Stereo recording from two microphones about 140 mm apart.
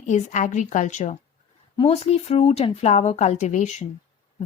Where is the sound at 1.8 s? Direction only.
45° left (ahead or behind).